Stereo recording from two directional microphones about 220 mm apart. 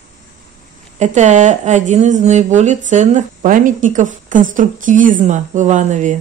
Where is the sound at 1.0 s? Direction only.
35° right (ahead or behind).